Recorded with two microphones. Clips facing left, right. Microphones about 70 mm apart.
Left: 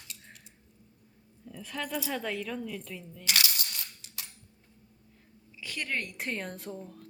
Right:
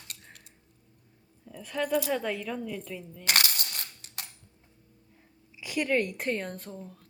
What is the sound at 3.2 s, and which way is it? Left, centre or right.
Coin, right.